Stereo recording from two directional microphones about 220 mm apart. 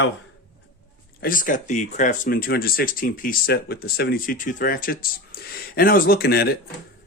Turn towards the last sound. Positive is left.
turn(degrees=45)  # may be behind; listen again after turning